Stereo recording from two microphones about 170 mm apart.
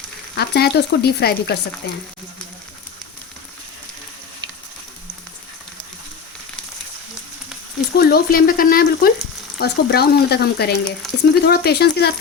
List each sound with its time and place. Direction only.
0.3 s speech: 70° left (ahead or behind)
7.9 s speech: 65° left (ahead or behind)